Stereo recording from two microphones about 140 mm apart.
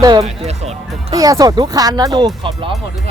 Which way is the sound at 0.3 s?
50° right (ahead or behind).